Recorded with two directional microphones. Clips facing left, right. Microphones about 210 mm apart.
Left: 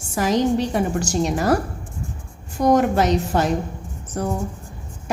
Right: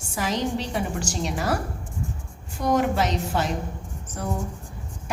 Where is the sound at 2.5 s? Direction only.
45° left (ahead or behind).